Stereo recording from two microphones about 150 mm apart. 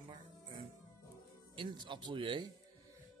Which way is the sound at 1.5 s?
30° right (ahead or behind).